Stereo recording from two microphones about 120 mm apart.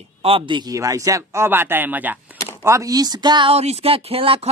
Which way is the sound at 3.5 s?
55° right (ahead or behind).